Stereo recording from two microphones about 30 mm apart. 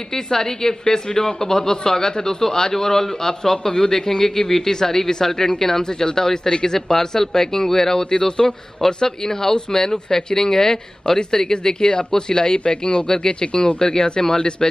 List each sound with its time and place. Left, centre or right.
0.1 s a man's voice: centre